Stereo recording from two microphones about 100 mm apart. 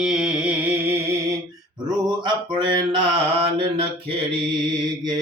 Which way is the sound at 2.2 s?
50° right (ahead or behind).